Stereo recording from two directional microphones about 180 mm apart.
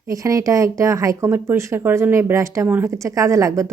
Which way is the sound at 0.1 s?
20° right (ahead or behind).